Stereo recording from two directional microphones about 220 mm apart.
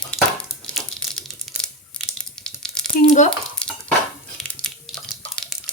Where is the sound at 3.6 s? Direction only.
5° left (ahead or behind).